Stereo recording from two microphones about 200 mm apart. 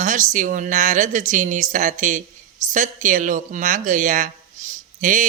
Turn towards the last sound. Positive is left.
turn(degrees=-40)  # may be behind; listen again after turning